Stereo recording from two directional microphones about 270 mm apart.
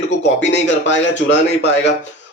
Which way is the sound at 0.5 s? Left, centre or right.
Left.